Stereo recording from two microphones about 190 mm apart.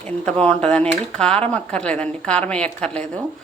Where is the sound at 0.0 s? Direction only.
5° left (ahead or behind).